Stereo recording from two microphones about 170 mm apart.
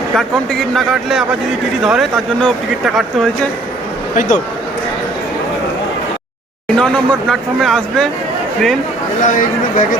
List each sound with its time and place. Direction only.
0.2 s speech: centre (ahead or behind)
4.1 s speech: 50° left (ahead or behind)
6.7 s speech: 5° left (ahead or behind)
9.2 s speech: 50° left (ahead or behind)